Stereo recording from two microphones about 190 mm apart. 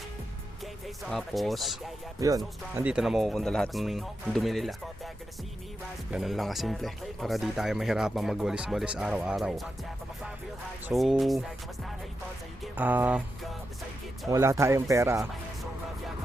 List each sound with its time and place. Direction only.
1.0 s speech: centre (ahead or behind)
2.2 s speech: 15° right (ahead or behind)
2.7 s speech: 5° right (ahead or behind)
6.1 s speech: centre (ahead or behind)
10.8 s speech: centre (ahead or behind)
12.7 s speech: 10° right (ahead or behind)
14.3 s speech: 15° right (ahead or behind)